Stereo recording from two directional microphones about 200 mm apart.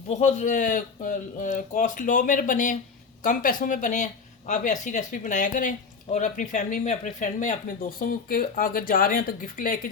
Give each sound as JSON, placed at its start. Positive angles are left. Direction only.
{"t": 0.1, "sound": "speech", "side_deg": 35}